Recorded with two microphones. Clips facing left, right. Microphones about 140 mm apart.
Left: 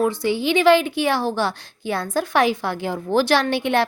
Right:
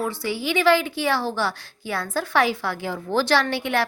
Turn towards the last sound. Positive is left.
turn(degrees=20)  # may be behind; listen again after turning